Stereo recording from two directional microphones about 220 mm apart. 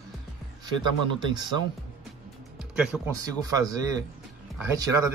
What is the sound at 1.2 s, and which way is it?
Speech, 20° right (ahead or behind).